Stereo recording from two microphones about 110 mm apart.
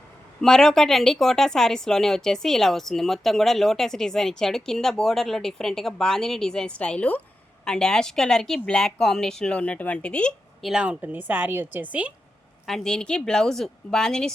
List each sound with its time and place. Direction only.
0.4 s speech: 5° left (ahead or behind)
10.7 s a woman's voice: 10° right (ahead or behind)
12.6 s speech: 5° left (ahead or behind)